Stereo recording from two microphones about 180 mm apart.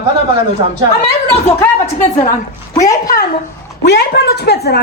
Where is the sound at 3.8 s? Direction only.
70° left (ahead or behind).